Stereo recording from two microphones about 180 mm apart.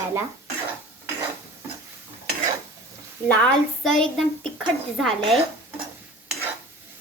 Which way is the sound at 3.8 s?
Centre (ahead or behind).